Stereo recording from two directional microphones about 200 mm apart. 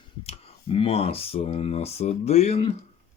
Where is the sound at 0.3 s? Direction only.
30° left (ahead or behind).